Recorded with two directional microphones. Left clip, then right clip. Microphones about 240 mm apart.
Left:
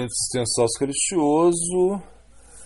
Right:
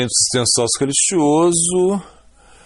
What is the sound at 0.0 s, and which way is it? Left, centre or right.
Speech, right.